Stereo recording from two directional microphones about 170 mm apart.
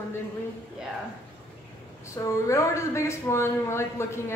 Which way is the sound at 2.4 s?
15° left (ahead or behind).